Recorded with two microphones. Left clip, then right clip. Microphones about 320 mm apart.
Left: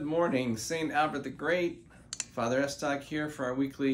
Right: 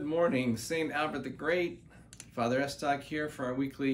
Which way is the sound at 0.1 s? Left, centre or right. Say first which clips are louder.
Even; centre.